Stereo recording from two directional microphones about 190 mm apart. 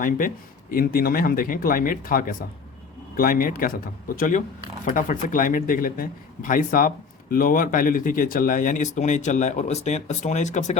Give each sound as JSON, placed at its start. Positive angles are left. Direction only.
{"t": 0.0, "sound": "speech", "side_deg": 45}